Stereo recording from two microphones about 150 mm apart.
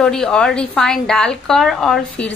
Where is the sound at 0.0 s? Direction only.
5° left (ahead or behind).